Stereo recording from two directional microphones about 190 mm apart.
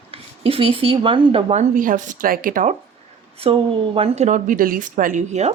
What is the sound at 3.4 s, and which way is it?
Speech, 30° right (ahead or behind).